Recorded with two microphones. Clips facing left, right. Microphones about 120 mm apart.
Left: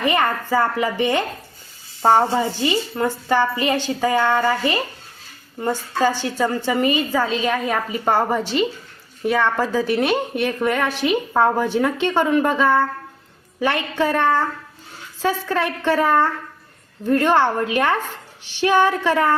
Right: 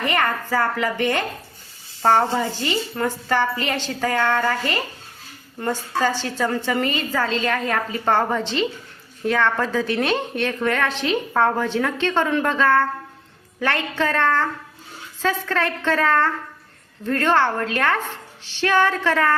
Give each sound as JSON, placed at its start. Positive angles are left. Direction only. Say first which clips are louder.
{"t": 0.0, "sound": "a woman's voice", "louder": "left 2 dB", "side_deg": 15}